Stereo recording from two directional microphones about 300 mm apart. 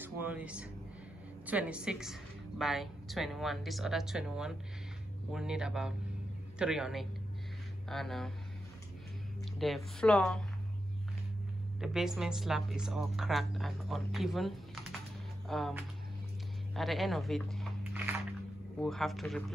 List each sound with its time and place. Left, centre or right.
0.0 s speech: centre
9.6 s speech: centre
11.8 s speech: centre